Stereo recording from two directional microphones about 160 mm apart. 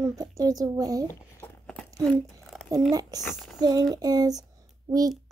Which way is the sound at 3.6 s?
25° right (ahead or behind).